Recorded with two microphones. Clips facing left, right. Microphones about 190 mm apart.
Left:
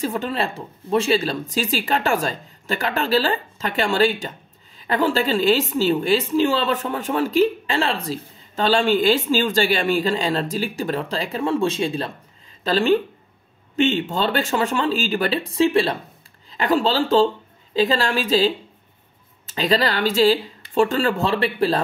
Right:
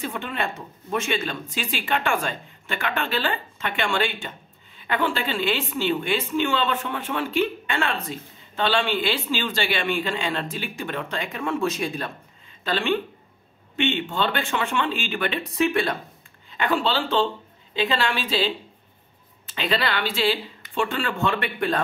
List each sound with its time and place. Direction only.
0.0 s a woman's voice: 35° left (ahead or behind)